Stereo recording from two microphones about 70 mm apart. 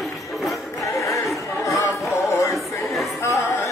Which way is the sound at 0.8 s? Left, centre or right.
Left.